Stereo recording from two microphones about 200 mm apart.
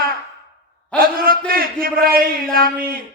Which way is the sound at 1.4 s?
45° right (ahead or behind).